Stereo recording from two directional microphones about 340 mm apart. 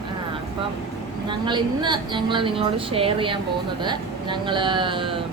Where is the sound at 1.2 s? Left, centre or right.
Centre.